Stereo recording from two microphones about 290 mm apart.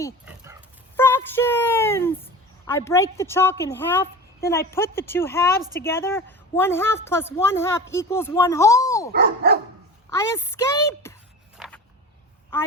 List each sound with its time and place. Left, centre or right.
0.3 s dog: centre
0.9 s a woman's voice: centre
9.1 s dog: right
10.1 s a woman's voice: centre
11.5 s a sound: centre